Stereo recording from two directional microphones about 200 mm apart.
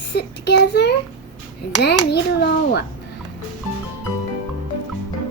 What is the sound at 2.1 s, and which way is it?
Speech, 55° left (ahead or behind).